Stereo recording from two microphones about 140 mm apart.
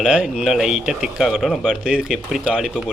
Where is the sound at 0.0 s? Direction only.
5° right (ahead or behind).